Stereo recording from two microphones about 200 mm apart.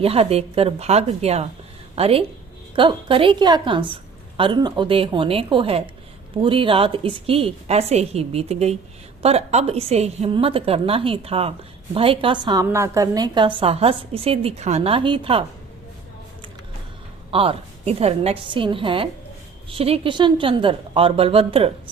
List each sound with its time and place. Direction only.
0.0 s a woman's voice: 30° right (ahead or behind)
17.3 s a woman's voice: 30° right (ahead or behind)